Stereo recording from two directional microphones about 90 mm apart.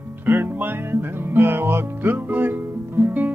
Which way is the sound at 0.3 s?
25° right (ahead or behind).